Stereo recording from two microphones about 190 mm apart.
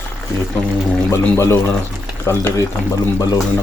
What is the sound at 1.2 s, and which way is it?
Speech, 10° left (ahead or behind).